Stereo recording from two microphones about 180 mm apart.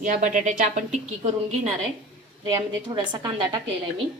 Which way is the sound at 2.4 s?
25° right (ahead or behind).